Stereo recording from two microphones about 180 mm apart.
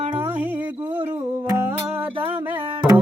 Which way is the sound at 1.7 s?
10° right (ahead or behind).